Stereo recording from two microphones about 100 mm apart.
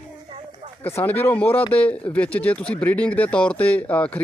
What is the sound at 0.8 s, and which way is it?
Speech, 20° left (ahead or behind).